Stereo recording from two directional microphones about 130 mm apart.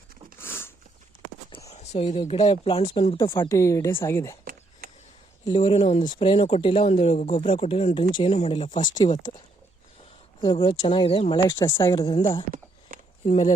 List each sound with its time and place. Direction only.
0.3 s a sound: 20° left (ahead or behind)
1.7 s speech: 55° left (ahead or behind)
3.5 s speech: 25° left (ahead or behind)
5.5 s speech: 45° left (ahead or behind)
10.4 s speech: 45° left (ahead or behind)
12.9 s a sound: 90° right
13.2 s speech: 60° left (ahead or behind)